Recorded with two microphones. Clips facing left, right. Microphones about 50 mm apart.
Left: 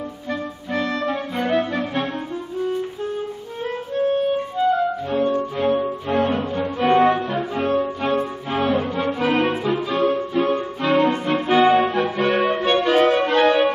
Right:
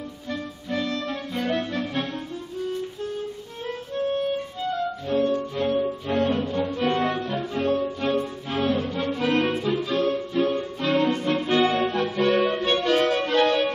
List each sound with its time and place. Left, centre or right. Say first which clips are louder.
0.3 s clarinet: left 4 dB; centre
4.4 s music: left 8 dB; centre